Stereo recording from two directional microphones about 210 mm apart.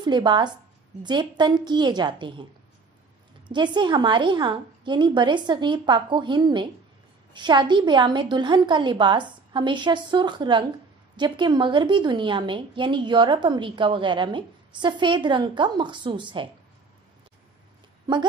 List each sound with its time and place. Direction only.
0.0 s a woman's voice: 20° right (ahead or behind)
3.4 s a woman's voice: 20° right (ahead or behind)
18.1 s a woman's voice: 20° right (ahead or behind)